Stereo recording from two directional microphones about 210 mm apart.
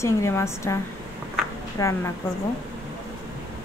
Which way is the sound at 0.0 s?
15° left (ahead or behind).